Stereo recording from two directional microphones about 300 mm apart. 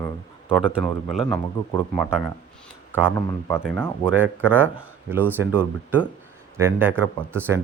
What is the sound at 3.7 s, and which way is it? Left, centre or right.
Speech, centre.